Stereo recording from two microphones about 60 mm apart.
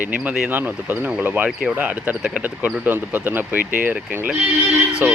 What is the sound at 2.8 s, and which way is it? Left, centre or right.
Speech, right.